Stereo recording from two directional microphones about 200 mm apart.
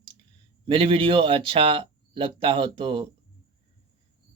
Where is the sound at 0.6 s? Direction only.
25° right (ahead or behind).